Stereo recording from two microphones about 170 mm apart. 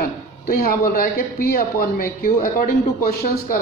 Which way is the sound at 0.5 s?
60° left (ahead or behind).